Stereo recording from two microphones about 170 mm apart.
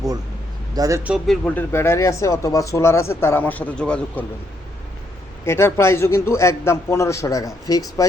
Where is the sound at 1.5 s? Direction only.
10° left (ahead or behind).